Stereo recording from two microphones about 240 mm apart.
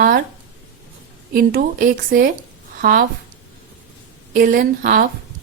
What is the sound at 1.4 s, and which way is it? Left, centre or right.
A woman's voice, right.